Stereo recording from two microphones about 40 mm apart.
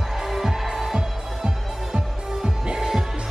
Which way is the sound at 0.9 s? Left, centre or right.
Centre.